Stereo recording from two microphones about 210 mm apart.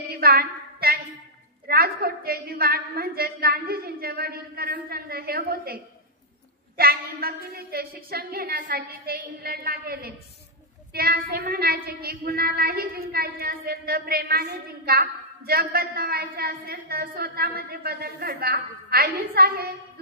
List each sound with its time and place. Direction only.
0.1 s a sound: 45° right (ahead or behind)
1.7 s a woman's voice: 45° right (ahead or behind)
6.8 s a woman's voice: 45° right (ahead or behind)